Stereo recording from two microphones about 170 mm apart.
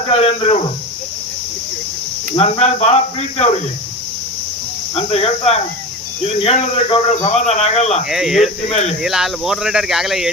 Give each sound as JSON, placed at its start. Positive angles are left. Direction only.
{"t": 0.1, "sound": "speech", "side_deg": 35}
{"t": 2.3, "sound": "speech", "side_deg": 40}
{"t": 4.9, "sound": "speech", "side_deg": 35}
{"t": 8.1, "sound": "speech", "side_deg": 0}
{"t": 8.7, "sound": "speech", "side_deg": 40}
{"t": 9.0, "sound": "speech", "side_deg": 0}